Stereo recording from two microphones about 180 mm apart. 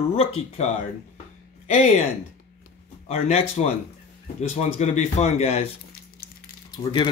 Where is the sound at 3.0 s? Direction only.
35° left (ahead or behind).